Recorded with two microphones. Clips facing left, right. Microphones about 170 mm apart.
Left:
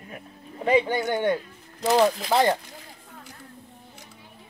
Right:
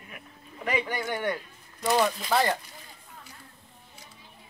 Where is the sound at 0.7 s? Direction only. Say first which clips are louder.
Left 8 dB; 25° left (ahead or behind).